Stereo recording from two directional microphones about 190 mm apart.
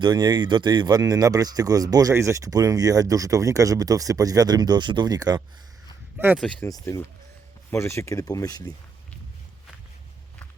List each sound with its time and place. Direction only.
0.0 s speech: 20° right (ahead or behind)
6.3 s speech: 5° left (ahead or behind)
6.7 s speech: 20° left (ahead or behind)